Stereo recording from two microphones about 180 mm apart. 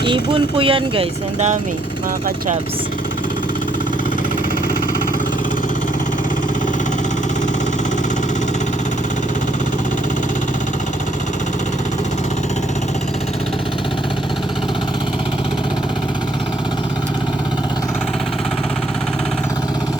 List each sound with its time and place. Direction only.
0.0 s speech: 25° right (ahead or behind)